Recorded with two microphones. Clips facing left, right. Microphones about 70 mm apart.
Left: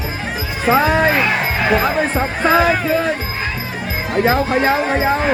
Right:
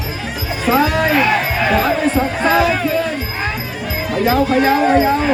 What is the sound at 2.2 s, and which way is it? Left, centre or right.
Speech, left.